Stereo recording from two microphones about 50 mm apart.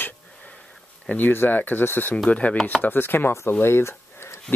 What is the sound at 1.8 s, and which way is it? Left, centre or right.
Chopping, left.